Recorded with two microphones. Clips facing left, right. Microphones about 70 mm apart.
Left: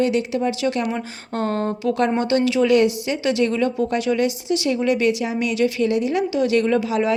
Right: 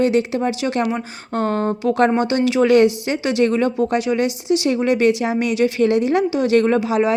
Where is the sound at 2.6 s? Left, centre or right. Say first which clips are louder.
Right 3 dB; right.